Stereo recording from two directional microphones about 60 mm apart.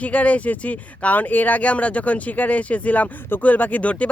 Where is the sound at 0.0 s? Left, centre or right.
Left.